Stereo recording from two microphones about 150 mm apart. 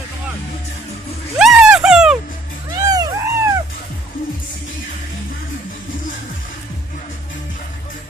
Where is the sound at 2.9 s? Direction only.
25° right (ahead or behind).